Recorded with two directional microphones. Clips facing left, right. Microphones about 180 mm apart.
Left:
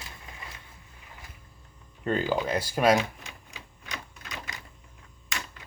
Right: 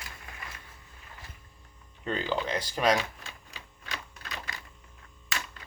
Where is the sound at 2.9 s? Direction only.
20° left (ahead or behind).